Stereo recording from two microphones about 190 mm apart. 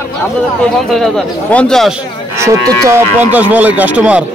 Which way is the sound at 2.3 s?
15° right (ahead or behind).